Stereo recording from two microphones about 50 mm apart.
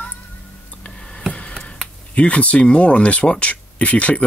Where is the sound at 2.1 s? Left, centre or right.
Left.